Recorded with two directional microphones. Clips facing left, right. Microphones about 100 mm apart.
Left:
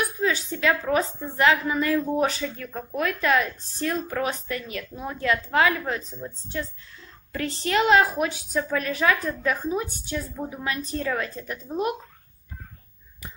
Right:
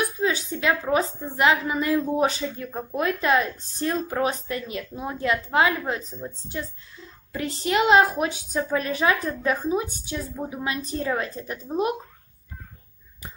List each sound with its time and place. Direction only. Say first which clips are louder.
0.2 s a woman's voice: left 2 dB; 20° right (ahead or behind)
7.6 s a woman's voice: right 1 dB; 20° right (ahead or behind)